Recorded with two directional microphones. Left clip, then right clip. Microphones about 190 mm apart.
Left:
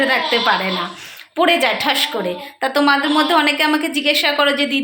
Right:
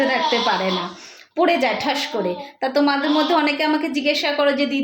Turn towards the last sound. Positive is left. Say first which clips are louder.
# left 3 dB
turn(degrees=-5)  # may be behind; listen again after turning